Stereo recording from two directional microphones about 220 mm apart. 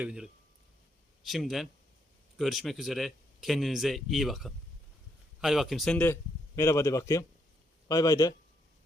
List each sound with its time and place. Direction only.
0.0 s a man's voice: 5° right (ahead or behind); by 8.3 s 15° left (ahead or behind)